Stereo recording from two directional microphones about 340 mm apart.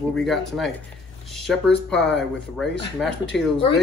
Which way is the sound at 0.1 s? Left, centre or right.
Centre.